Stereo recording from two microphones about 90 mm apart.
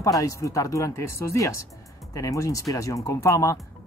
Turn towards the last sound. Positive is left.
turn(degrees=35)  # may be behind; listen again after turning